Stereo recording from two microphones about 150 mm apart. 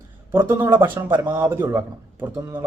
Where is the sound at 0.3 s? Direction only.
15° right (ahead or behind).